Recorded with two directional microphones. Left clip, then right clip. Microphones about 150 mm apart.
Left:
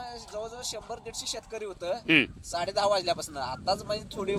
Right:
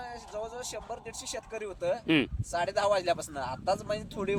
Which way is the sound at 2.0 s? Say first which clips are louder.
Left 6 dB; 20° right (ahead or behind).